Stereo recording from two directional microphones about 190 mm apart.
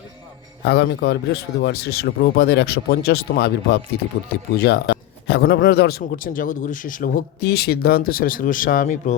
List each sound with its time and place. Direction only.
0.6 s a man's voice: 60° left (ahead or behind); by 9.1 s 45° left (ahead or behind)